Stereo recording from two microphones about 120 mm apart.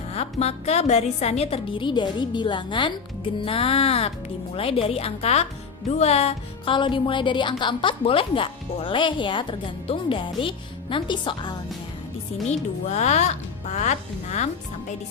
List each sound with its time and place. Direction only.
0.1 s a woman's voice: 60° left (ahead or behind)
6.7 s a woman's voice: 45° left (ahead or behind)
12.5 s speech: 70° left (ahead or behind)